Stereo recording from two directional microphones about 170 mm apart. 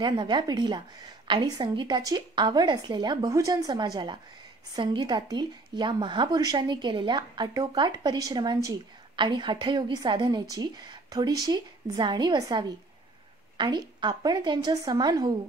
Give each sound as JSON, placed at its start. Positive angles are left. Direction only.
{"t": 0.0, "sound": "a woman's voice", "side_deg": -25}